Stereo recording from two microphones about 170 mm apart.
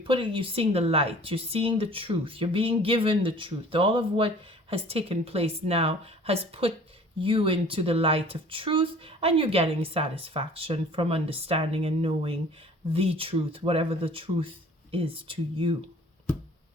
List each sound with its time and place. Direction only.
0.0 s speech: 30° right (ahead or behind)